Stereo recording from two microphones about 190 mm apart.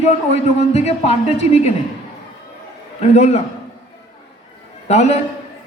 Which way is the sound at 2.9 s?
35° left (ahead or behind).